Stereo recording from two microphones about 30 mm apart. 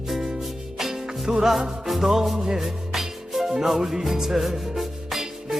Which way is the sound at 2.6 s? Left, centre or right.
Centre.